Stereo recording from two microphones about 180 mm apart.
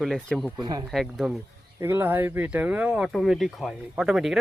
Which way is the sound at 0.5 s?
20° right (ahead or behind).